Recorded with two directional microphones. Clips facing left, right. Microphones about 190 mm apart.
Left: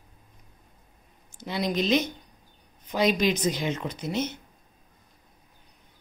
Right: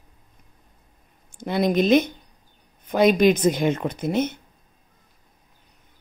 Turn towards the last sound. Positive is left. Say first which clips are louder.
# right 6 dB
turn(degrees=-55)  # may be behind; listen again after turning